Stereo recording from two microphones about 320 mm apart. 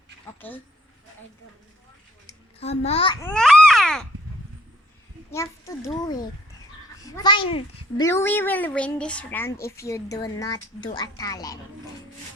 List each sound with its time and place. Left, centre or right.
0.4 s speech: centre
2.2 s babbling: centre
5.3 s speech: centre